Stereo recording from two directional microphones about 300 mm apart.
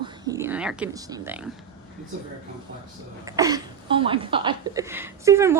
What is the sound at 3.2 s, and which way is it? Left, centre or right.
Speech, centre.